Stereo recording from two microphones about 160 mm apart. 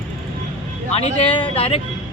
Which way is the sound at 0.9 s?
40° left (ahead or behind).